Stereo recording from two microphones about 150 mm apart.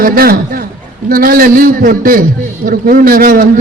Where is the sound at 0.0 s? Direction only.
75° right (ahead or behind).